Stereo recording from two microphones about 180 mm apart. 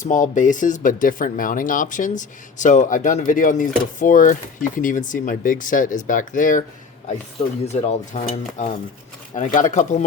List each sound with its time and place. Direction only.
0.0 s speech: 45° left (ahead or behind)
7.6 s dishes: 35° left (ahead or behind)
9.3 s speech: 45° left (ahead or behind)